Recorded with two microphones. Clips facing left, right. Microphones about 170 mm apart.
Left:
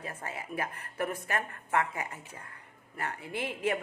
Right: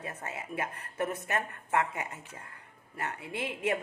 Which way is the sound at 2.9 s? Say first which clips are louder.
Even; 25° right (ahead or behind).